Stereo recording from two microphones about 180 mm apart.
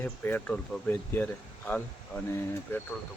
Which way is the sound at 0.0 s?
10° left (ahead or behind).